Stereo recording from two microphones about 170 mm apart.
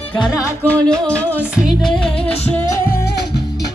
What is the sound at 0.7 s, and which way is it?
Music, 5° left (ahead or behind).